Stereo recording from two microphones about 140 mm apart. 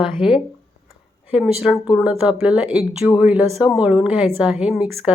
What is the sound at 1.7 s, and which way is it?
Speech, 20° left (ahead or behind).